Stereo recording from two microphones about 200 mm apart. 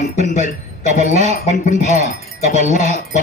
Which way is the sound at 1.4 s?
35° left (ahead or behind).